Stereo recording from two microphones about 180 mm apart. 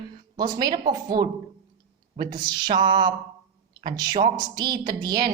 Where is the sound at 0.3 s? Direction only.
20° right (ahead or behind).